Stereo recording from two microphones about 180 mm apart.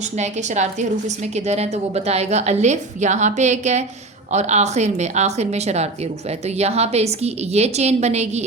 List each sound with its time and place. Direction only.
0.2 s a woman's voice: 40° right (ahead or behind)